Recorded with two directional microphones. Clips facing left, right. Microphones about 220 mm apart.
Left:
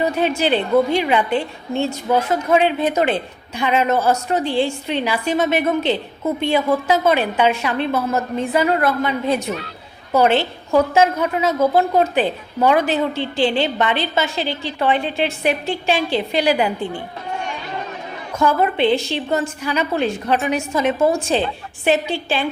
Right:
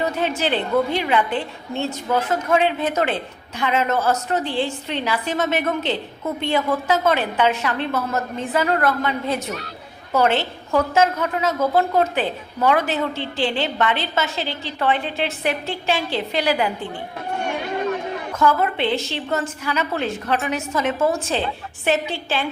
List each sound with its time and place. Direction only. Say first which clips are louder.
0.0 s a woman's voice: left 4 dB; 15° left (ahead or behind)
18.3 s a woman's voice: left 3 dB; 15° left (ahead or behind)